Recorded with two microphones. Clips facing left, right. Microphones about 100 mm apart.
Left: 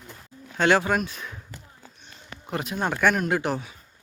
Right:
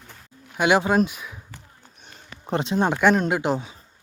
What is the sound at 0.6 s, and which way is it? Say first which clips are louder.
Speech: right 2 dB; 15° right (ahead or behind).